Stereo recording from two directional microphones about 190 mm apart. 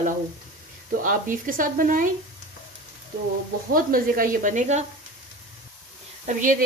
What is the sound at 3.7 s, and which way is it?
A woman's voice, 50° right (ahead or behind).